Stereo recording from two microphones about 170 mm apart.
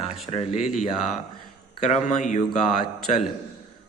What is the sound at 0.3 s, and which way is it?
Speech, 40° left (ahead or behind).